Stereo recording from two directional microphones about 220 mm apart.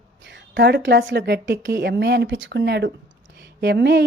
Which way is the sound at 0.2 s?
55° right (ahead or behind).